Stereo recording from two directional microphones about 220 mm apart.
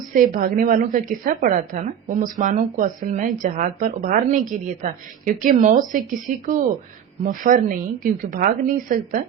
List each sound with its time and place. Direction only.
0.1 s a woman's voice: 40° right (ahead or behind)